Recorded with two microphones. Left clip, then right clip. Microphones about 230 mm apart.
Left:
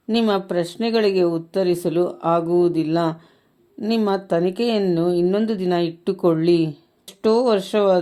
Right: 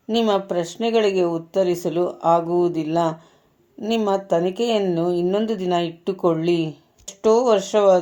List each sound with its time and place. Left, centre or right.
0.1 s speech: left